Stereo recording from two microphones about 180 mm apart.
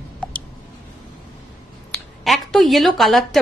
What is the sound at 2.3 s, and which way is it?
A woman's voice, centre (ahead or behind).